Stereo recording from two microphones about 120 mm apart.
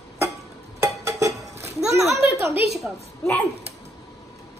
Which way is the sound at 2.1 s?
25° right (ahead or behind).